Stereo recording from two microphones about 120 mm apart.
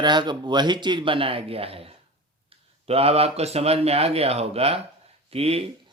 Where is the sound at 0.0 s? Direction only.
40° right (ahead or behind); by 5.6 s 55° right (ahead or behind).